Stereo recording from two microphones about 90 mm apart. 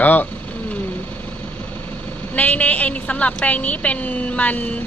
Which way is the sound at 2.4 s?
20° left (ahead or behind).